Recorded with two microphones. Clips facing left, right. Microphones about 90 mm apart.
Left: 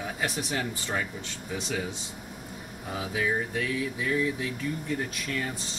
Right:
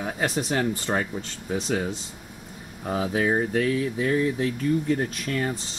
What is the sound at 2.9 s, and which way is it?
Speech, 45° right (ahead or behind).